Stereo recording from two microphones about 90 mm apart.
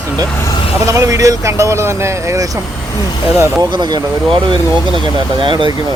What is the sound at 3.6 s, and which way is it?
Speech, 55° right (ahead or behind).